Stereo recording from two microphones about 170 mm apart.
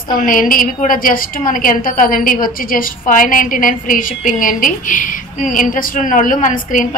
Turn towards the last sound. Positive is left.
turn(degrees=50)  # may be behind; listen again after turning